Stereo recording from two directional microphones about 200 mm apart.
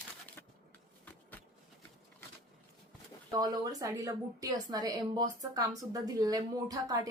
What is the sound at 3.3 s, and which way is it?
A woman's voice, 20° right (ahead or behind).